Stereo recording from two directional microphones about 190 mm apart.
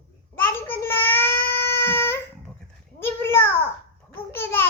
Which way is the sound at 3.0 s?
10° left (ahead or behind).